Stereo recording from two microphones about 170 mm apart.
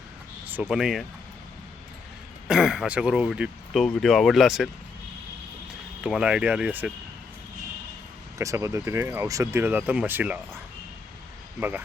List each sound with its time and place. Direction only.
0.7 s speech: 5° right (ahead or behind)
2.5 s speech: 5° right (ahead or behind)
6.0 s speech: 5° right (ahead or behind)
8.4 s speech: 20° right (ahead or behind)